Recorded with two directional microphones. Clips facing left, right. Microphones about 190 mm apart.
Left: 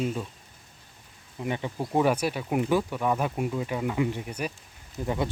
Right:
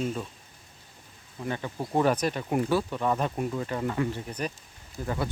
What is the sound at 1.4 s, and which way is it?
Speech, 15° left (ahead or behind).